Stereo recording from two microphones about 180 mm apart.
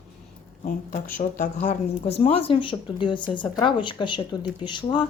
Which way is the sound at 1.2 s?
45° left (ahead or behind).